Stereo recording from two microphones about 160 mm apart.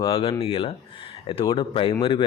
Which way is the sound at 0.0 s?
35° left (ahead or behind).